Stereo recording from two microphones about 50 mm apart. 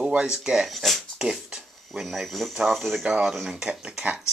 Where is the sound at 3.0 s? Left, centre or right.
Centre.